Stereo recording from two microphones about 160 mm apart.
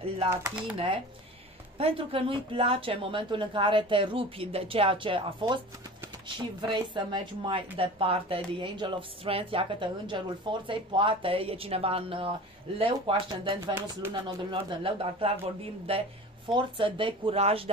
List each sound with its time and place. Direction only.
0.3 s speech: 10° right (ahead or behind)
0.7 s speech: 35° right (ahead or behind)